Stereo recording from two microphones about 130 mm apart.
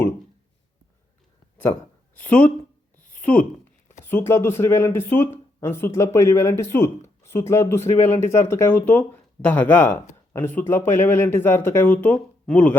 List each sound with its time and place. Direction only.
2.1 s speech: 10° left (ahead or behind)
3.0 s a sound: 15° left (ahead or behind)
4.0 s speech: 15° left (ahead or behind)